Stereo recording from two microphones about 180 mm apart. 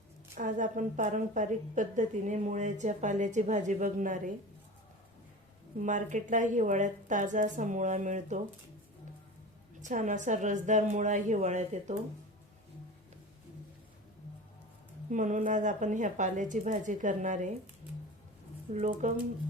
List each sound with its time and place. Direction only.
0.3 s a woman's voice: 45° right (ahead or behind)
5.8 s a woman's voice: 45° right (ahead or behind)
9.8 s a woman's voice: 45° right (ahead or behind)
15.1 s a woman's voice: 45° right (ahead or behind)
18.7 s a woman's voice: 40° right (ahead or behind)